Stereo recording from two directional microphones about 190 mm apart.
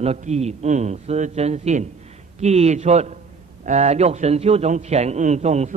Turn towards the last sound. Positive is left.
turn(degrees=-35)  # may be behind; listen again after turning